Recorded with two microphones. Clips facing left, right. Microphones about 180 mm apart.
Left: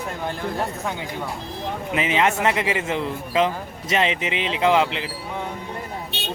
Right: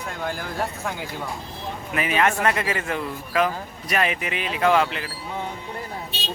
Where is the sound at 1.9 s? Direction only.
20° left (ahead or behind).